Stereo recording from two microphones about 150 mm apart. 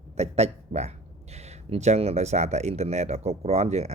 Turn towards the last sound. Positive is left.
turn(degrees=-45)  # may be behind; listen again after turning